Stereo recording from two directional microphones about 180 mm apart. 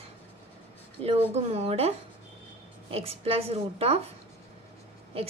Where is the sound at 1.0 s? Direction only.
35° right (ahead or behind).